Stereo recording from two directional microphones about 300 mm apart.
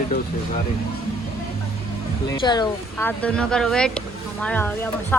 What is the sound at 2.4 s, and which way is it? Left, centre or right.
Speech, centre.